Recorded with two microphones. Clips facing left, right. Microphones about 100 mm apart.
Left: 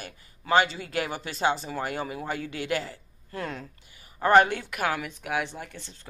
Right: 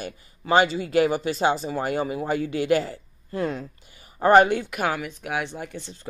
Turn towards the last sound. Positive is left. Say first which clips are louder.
# right 6 dB
turn(degrees=-10)  # may be behind; listen again after turning